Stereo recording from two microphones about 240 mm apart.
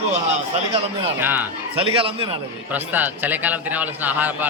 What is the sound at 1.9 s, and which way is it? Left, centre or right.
Speech, right.